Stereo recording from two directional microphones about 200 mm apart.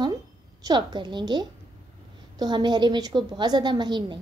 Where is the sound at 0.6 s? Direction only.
20° right (ahead or behind).